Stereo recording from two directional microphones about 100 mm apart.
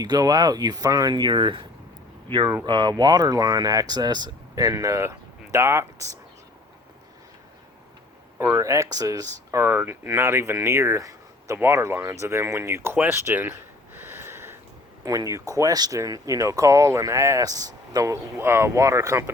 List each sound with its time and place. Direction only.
0.0 s speech: 40° right (ahead or behind); by 1.6 s 55° right (ahead or behind)
2.6 s speech: 50° right (ahead or behind); by 6.1 s 30° right (ahead or behind)
8.5 s speech: 30° right (ahead or behind)
9.6 s speech: 20° right (ahead or behind)
12.2 s a sound: 30° right (ahead or behind)
15.0 s speech: 35° right (ahead or behind)